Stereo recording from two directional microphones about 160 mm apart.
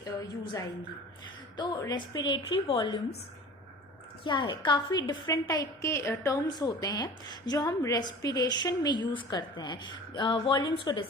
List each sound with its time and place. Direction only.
0.0 s a woman's voice: 20° left (ahead or behind)
4.2 s a woman's voice: 30° left (ahead or behind)